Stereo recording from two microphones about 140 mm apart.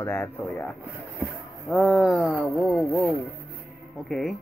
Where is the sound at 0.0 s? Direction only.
15° left (ahead or behind).